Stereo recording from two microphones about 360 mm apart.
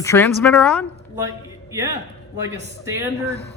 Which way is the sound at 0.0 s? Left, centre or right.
Centre.